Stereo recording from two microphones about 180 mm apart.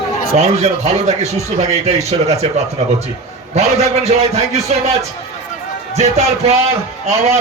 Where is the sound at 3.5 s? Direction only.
35° right (ahead or behind).